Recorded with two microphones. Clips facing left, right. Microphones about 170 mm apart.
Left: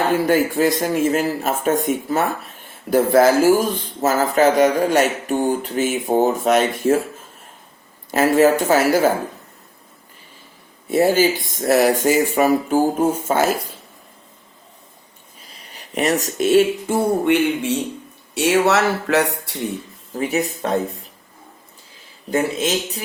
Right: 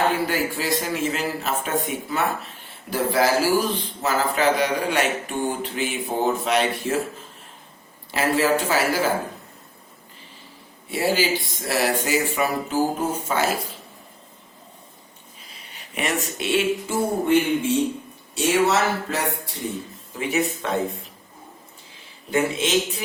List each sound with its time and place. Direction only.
0.1 s speech: 50° left (ahead or behind)
8.1 s speech: 45° left (ahead or behind)
10.8 s speech: 45° left (ahead or behind)
15.7 s speech: 40° left (ahead or behind)
17.2 s speech: 70° left (ahead or behind)
20.1 s speech: 40° left (ahead or behind)
22.3 s speech: 40° left (ahead or behind)